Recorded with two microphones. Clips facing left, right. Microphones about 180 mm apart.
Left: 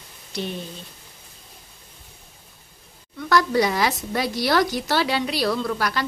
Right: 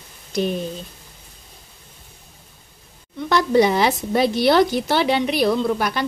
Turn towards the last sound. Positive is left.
turn(degrees=-20)  # may be behind; listen again after turning